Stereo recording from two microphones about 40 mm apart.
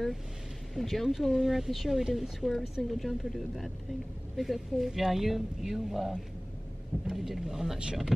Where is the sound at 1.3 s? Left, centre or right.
Centre.